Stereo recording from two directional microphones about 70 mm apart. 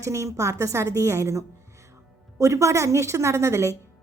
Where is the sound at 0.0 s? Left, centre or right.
Right.